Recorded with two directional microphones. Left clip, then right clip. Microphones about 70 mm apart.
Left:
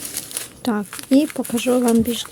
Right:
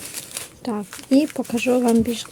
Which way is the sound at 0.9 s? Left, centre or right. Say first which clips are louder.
Left 1 dB; left.